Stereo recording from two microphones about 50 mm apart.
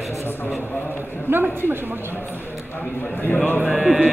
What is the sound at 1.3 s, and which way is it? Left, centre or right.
Speech, right.